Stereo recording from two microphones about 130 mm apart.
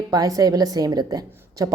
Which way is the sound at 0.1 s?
30° right (ahead or behind).